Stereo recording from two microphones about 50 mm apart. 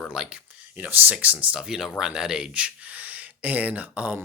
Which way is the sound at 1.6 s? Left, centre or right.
Centre.